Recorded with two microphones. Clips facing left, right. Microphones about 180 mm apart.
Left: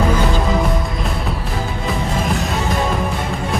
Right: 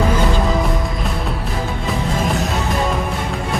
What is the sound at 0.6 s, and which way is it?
Music, centre (ahead or behind).